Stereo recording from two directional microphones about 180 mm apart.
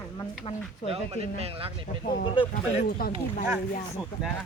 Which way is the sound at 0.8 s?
35° right (ahead or behind).